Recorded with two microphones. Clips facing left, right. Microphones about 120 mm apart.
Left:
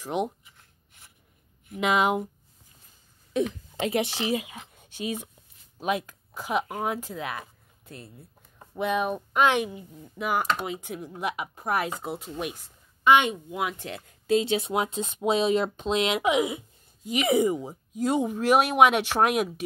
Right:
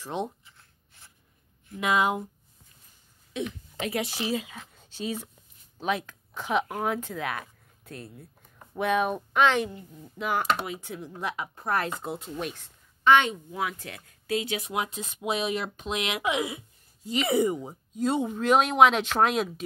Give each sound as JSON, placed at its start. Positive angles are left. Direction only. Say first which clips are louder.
{"t": 0.0, "sound": "writing", "louder": "left 4 dB", "side_deg": 15}
{"t": 1.7, "sound": "speech", "louder": "left 2 dB", "side_deg": 20}
{"t": 3.7, "sound": "speech", "louder": "left 4 dB", "side_deg": 25}